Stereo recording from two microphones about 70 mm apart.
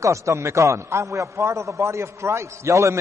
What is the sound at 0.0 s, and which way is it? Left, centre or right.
A man's voice, right.